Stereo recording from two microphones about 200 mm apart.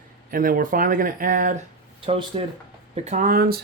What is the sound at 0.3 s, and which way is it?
Speech, 45° right (ahead or behind).